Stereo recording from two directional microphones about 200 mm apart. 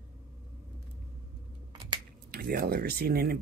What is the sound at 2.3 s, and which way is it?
Speech, 50° right (ahead or behind).